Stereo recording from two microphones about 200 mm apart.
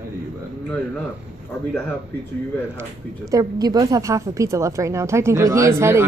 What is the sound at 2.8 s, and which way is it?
Speech, 15° right (ahead or behind).